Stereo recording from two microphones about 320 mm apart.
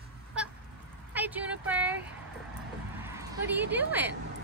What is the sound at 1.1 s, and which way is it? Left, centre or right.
Speech, centre.